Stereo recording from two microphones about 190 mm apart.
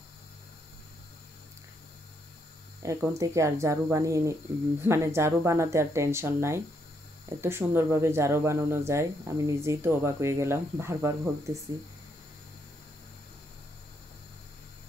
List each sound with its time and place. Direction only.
2.8 s speech: 15° right (ahead or behind)